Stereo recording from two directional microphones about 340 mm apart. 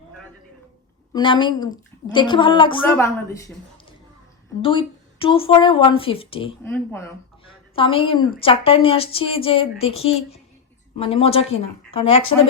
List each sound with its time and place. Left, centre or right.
1.1 s a woman's voice: centre
4.6 s a woman's voice: centre